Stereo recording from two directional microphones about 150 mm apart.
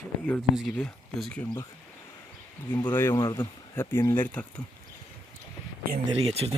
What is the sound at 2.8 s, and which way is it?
Speech, 15° left (ahead or behind).